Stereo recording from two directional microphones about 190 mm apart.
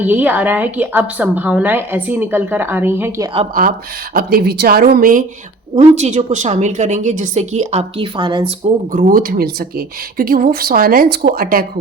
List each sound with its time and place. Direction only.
0.1 s a woman's voice: 10° right (ahead or behind)
4.1 s speech: 50° right (ahead or behind)
5.7 s a woman's voice: 35° right (ahead or behind)
8.9 s speech: 45° right (ahead or behind)